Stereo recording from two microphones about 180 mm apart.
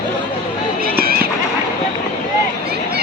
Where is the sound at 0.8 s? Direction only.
55° right (ahead or behind).